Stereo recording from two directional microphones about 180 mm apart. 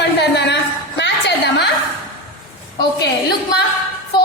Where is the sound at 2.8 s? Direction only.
65° left (ahead or behind).